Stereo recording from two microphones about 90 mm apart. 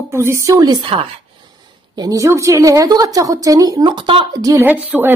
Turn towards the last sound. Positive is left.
turn(degrees=-10)  # may be behind; listen again after turning